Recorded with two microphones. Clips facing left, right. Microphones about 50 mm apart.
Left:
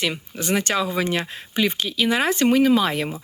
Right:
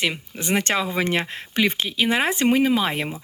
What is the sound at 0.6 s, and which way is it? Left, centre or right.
Speech, right.